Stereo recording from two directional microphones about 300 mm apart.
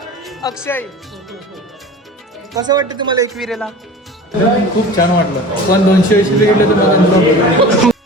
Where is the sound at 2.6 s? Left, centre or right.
Centre.